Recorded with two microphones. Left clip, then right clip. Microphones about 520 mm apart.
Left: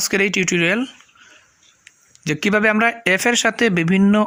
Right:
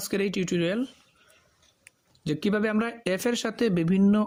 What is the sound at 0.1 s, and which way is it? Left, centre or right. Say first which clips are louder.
Speech: left 8 dB; right.